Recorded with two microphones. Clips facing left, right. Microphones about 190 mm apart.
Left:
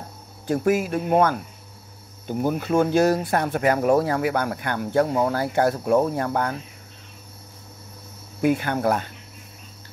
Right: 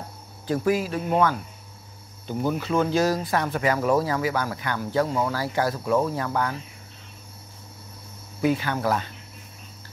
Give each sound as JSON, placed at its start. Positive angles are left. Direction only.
{"t": 0.5, "sound": "speech", "side_deg": 50}
{"t": 2.4, "sound": "speech", "side_deg": 50}
{"t": 5.0, "sound": "speech", "side_deg": 30}
{"t": 5.3, "sound": "speech", "side_deg": 55}
{"t": 8.4, "sound": "speech", "side_deg": 50}